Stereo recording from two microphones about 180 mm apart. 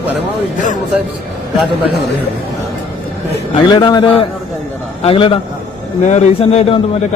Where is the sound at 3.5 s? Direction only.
25° left (ahead or behind).